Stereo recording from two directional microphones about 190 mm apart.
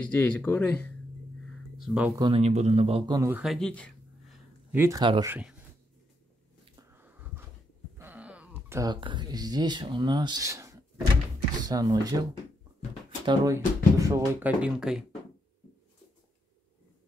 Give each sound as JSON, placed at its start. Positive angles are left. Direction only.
{"t": 0.0, "sound": "speech", "side_deg": 5}
{"t": 1.8, "sound": "speech", "side_deg": -5}
{"t": 2.1, "sound": "speech", "side_deg": -25}
{"t": 2.4, "sound": "speech", "side_deg": -35}
{"t": 3.2, "sound": "speech", "side_deg": -10}
{"t": 3.4, "sound": "a sound", "side_deg": 5}
{"t": 4.7, "sound": "speech", "side_deg": -15}
{"t": 5.0, "sound": "speech", "side_deg": -25}
{"t": 5.3, "sound": "speech", "side_deg": -5}
{"t": 6.9, "sound": "a sound", "side_deg": -10}
{"t": 8.0, "sound": "speech", "side_deg": -10}